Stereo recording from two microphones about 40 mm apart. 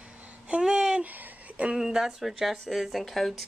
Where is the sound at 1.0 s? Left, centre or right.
Right.